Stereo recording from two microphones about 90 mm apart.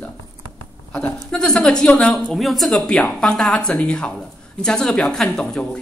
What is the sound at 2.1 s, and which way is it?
A woman's voice, centre (ahead or behind).